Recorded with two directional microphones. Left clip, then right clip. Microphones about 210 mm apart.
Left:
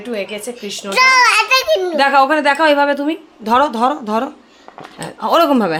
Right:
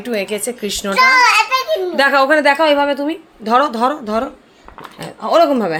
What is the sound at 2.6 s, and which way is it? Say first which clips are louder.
Speech: left 1 dB; 10° left (ahead or behind).